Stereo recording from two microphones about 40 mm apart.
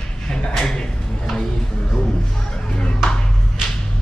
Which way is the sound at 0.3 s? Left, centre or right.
Centre.